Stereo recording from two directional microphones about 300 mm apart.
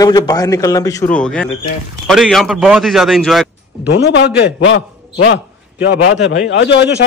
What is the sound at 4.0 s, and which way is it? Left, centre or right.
A man's voice, left.